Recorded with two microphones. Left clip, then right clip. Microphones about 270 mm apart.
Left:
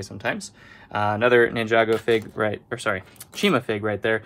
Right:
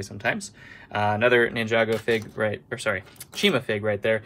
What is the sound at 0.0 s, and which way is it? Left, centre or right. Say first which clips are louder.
Speech: right 1 dB; centre.